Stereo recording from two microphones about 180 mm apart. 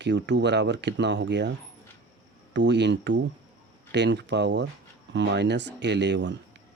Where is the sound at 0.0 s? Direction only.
75° right (ahead or behind).